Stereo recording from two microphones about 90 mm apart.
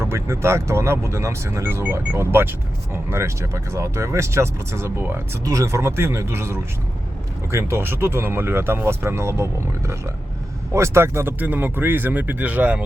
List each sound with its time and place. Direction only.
0.0 s speech: 30° right (ahead or behind)